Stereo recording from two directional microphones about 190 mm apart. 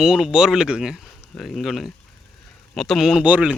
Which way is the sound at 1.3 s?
Centre (ahead or behind).